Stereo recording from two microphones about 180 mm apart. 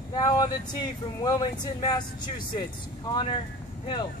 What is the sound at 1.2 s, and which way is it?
Speech, 20° left (ahead or behind).